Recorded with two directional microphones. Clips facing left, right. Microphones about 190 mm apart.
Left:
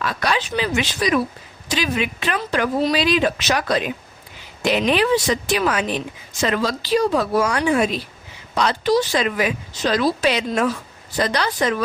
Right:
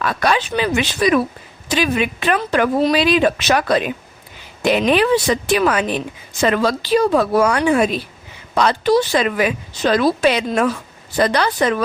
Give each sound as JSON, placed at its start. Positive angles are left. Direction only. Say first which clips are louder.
{"t": 0.0, "sound": "speech", "louder": "right 4 dB", "side_deg": -55}